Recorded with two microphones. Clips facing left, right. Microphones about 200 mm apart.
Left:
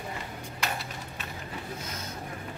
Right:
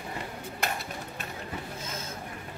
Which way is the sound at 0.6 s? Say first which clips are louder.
Right 1 dB; 50° right (ahead or behind).